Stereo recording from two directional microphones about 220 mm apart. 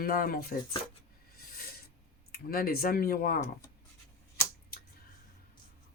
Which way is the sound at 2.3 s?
40° left (ahead or behind).